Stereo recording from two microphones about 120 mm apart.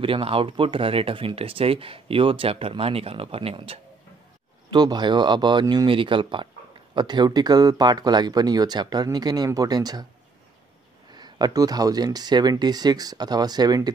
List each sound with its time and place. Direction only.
0.0 s speech: 50° right (ahead or behind)
4.6 s speech: 35° right (ahead or behind)
11.1 s speech: 35° right (ahead or behind)